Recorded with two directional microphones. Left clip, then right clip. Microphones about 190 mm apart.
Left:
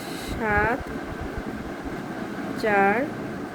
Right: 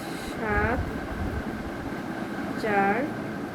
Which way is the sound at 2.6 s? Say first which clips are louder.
Left 4 dB; 75° left (ahead or behind).